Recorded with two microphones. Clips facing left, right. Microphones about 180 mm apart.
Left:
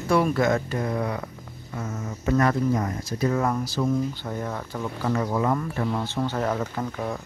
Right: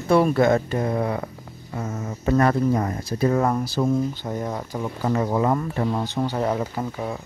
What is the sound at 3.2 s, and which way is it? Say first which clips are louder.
Speech: right 3 dB; 35° right (ahead or behind).